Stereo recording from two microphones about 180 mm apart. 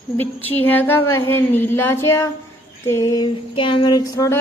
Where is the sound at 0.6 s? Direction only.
10° left (ahead or behind).